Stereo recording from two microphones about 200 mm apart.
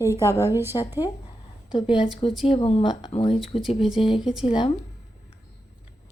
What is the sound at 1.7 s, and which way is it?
A woman's voice, 20° left (ahead or behind).